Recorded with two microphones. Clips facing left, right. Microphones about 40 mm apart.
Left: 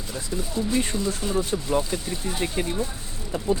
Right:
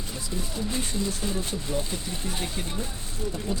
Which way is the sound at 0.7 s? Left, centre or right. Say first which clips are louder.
Left 5 dB; left.